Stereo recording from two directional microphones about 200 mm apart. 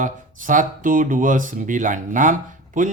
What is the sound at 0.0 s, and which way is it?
Speech, 40° right (ahead or behind).